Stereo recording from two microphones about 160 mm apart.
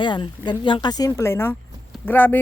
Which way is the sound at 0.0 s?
30° left (ahead or behind).